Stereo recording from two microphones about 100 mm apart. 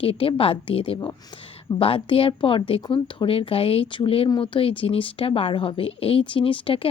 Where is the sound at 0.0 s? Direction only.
65° left (ahead or behind).